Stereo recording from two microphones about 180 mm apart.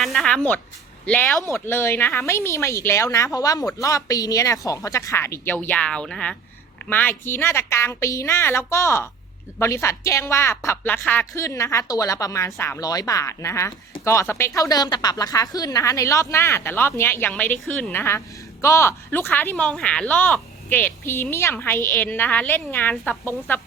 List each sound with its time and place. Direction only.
0.0 s speech: centre (ahead or behind)